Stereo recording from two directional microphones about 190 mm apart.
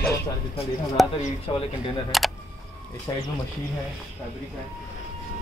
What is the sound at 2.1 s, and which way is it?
Speech, centre (ahead or behind).